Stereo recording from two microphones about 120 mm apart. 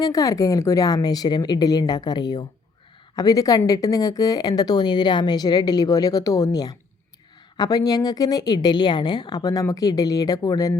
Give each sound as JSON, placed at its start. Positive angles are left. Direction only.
{"t": 0.0, "sound": "a woman's voice", "side_deg": 30}